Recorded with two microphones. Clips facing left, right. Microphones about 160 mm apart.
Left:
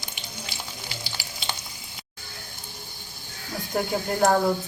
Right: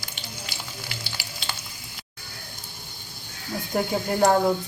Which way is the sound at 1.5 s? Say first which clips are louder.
Left 2 dB; 15° left (ahead or behind).